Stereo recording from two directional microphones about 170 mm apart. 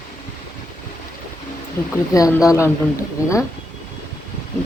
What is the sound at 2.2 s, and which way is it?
Speech, 20° left (ahead or behind).